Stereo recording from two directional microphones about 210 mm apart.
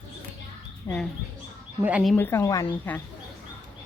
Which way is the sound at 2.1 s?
10° left (ahead or behind).